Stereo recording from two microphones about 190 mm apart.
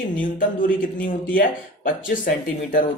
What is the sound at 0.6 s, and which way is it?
Speech, 45° left (ahead or behind).